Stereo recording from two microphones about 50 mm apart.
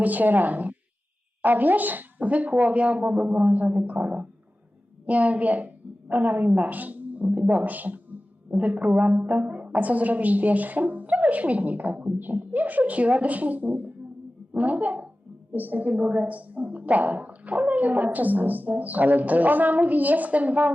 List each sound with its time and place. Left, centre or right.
0.0 s a woman's voice: right